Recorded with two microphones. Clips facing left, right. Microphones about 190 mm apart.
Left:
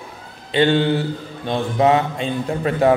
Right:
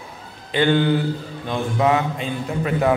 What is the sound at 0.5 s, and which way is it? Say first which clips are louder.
A man's voice: left 1 dB; 25° left (ahead or behind).